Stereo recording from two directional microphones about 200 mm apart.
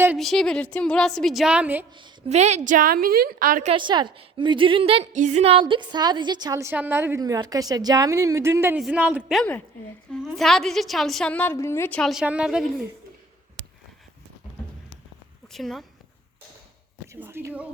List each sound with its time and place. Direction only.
0.2 s a woman's voice: centre (ahead or behind)
1.9 s a woman's voice: 25° right (ahead or behind); by 3.7 s 45° right (ahead or behind)
3.7 s a woman's voice: 25° right (ahead or behind); by 12.6 s 5° right (ahead or behind)
15.5 s a woman's voice: centre (ahead or behind)
17.1 s speech: 10° right (ahead or behind)